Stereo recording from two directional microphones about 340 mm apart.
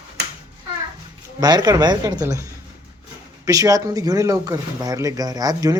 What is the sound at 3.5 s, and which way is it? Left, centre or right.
Speech, centre.